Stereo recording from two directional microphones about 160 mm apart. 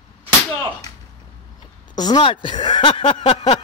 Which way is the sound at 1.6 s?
25° left (ahead or behind).